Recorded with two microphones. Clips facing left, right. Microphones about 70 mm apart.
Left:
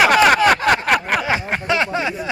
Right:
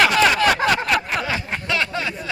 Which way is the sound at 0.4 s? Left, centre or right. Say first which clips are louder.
Left 3 dB; left.